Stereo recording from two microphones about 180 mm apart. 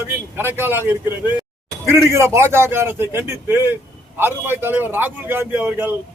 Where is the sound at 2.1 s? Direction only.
15° right (ahead or behind).